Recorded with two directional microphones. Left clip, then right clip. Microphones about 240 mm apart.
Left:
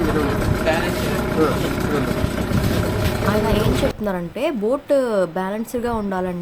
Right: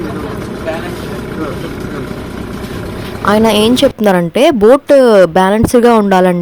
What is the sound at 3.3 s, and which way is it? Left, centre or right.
A woman's voice, right.